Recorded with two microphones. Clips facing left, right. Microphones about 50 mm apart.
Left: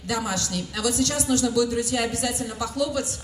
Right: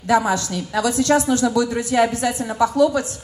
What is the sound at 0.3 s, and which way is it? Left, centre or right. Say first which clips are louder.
A woman's voice: right 7 dB; right.